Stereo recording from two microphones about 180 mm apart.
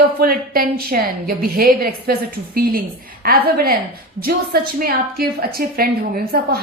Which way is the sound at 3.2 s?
55° right (ahead or behind).